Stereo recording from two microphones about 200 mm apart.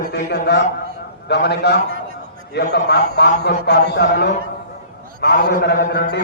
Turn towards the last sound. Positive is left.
turn(degrees=55)  # may be behind; listen again after turning